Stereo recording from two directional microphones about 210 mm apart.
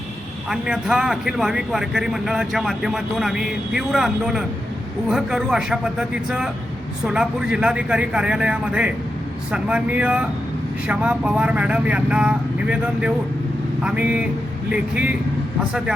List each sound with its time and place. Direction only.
0.4 s speech: 5° right (ahead or behind)